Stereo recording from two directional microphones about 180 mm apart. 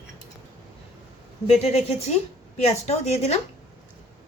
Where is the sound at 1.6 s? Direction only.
35° left (ahead or behind).